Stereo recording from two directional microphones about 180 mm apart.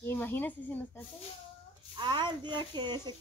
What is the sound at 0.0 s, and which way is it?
Speech, 10° left (ahead or behind).